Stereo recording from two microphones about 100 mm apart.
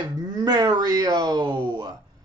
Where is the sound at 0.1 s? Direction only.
40° right (ahead or behind).